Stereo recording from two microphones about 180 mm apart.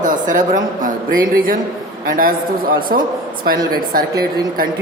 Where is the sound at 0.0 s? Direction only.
45° right (ahead or behind).